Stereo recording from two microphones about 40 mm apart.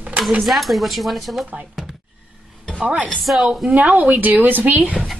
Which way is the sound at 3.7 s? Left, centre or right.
Right.